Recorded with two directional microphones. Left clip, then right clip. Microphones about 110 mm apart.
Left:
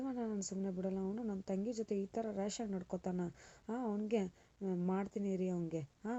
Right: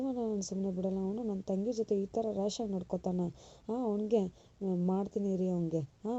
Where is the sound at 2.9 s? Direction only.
5° left (ahead or behind).